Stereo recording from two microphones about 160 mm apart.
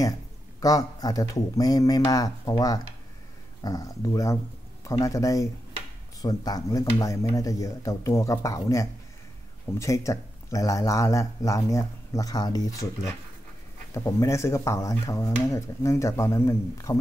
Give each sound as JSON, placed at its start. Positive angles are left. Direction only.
{"t": 0.6, "sound": "speech", "side_deg": 20}